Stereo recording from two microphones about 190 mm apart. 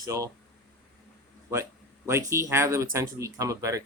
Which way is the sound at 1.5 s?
15° right (ahead or behind).